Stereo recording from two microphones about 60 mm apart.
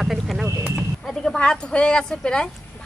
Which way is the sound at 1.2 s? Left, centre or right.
Centre.